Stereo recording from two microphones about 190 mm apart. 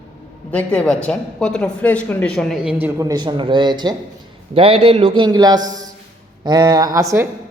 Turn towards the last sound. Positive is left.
turn(degrees=-15)  # may be behind; listen again after turning